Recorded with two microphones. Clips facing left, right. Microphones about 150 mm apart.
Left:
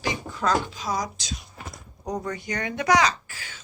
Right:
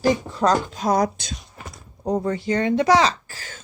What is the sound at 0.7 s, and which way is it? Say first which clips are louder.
Speech: right 9 dB; 55° right (ahead or behind).